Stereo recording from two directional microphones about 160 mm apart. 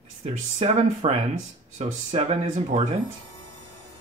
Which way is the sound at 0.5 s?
45° right (ahead or behind).